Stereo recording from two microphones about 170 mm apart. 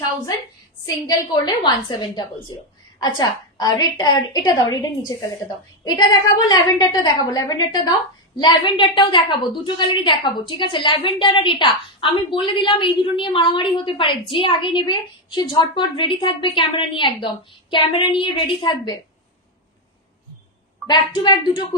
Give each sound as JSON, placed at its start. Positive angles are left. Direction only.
{"t": 0.8, "sound": "a woman's voice", "side_deg": 25}
{"t": 20.8, "sound": "a woman's voice", "side_deg": 25}